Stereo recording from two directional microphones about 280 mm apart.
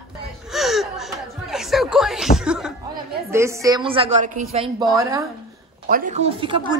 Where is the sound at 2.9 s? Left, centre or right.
Centre.